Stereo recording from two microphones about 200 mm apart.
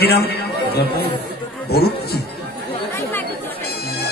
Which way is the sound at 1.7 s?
50° left (ahead or behind).